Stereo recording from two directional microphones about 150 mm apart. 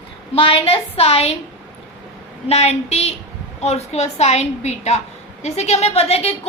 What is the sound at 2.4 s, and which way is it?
A woman's voice, 45° left (ahead or behind).